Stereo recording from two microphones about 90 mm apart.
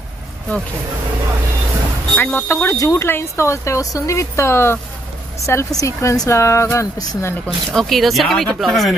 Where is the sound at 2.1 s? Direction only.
25° left (ahead or behind).